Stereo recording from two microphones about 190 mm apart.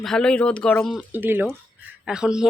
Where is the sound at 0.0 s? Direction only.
5° left (ahead or behind).